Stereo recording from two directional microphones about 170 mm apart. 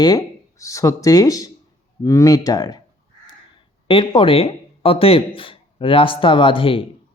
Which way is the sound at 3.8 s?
30° left (ahead or behind).